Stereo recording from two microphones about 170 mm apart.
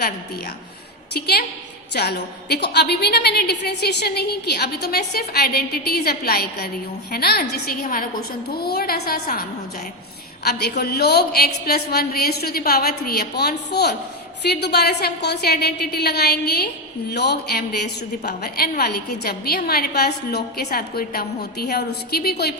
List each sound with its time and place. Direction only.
1.1 s a woman's voice: 70° left (ahead or behind)
10.4 s a woman's voice: 75° left (ahead or behind)